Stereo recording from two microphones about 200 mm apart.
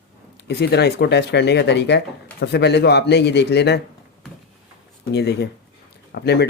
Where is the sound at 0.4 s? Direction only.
55° left (ahead or behind).